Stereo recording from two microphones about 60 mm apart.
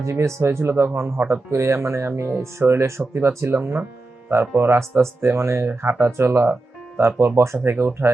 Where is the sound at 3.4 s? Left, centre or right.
Right.